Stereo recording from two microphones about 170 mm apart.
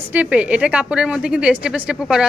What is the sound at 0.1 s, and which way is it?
A woman's voice, 10° right (ahead or behind).